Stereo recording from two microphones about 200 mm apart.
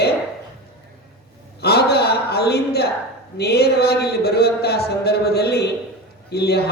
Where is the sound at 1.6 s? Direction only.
50° left (ahead or behind).